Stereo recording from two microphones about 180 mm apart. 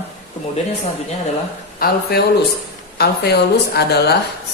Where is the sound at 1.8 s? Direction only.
55° left (ahead or behind).